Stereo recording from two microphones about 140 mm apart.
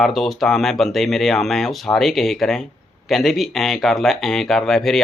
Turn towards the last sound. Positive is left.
turn(degrees=5)  # may be behind; listen again after turning